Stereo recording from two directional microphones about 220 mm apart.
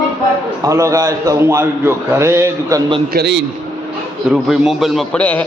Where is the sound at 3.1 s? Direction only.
50° right (ahead or behind).